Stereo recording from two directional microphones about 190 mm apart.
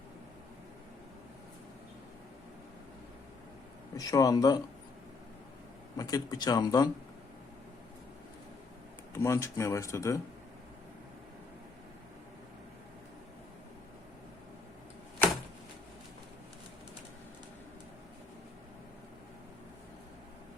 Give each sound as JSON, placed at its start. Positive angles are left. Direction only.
{"t": 3.9, "sound": "speech", "side_deg": 20}
{"t": 6.0, "sound": "speech", "side_deg": 20}
{"t": 9.1, "sound": "speech", "side_deg": 15}